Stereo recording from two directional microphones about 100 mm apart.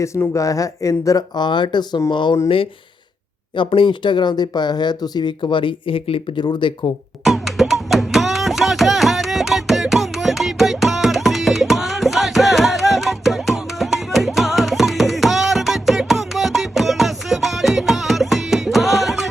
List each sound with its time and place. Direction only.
0.0 s speech: 30° left (ahead or behind)
1.4 s speech: 50° left (ahead or behind)
3.5 s speech: 55° left (ahead or behind)
6.4 s speech: 50° left (ahead or behind)
7.3 s music: centre (ahead or behind)